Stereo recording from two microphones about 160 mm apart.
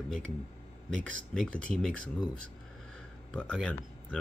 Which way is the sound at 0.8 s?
5° left (ahead or behind).